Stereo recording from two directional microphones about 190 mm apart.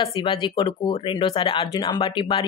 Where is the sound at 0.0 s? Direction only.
25° left (ahead or behind).